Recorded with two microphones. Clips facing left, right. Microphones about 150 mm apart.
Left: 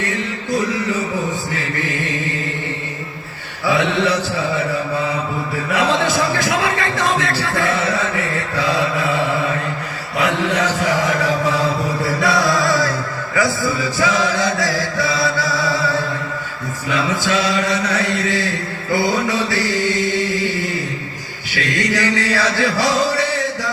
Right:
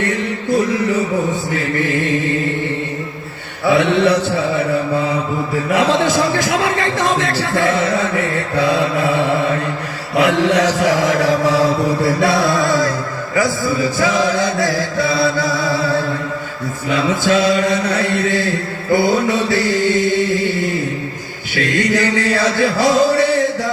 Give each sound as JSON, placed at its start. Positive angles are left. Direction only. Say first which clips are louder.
{"t": 0.0, "sound": "a sound", "louder": "right 4 dB", "side_deg": -55}
{"t": 1.5, "sound": "mantra", "louder": "right 5 dB", "side_deg": -55}
{"t": 3.7, "sound": "mantra", "louder": "right 4 dB", "side_deg": -55}
{"t": 5.6, "sound": "a man's voice", "louder": "right 3 dB", "side_deg": -50}
{"t": 10.2, "sound": "chant", "louder": "right 5 dB", "side_deg": -70}
{"t": 16.9, "sound": "a man's voice", "louder": "right 4 dB", "side_deg": -55}
{"t": 21.5, "sound": "music", "louder": "right 4 dB", "side_deg": -50}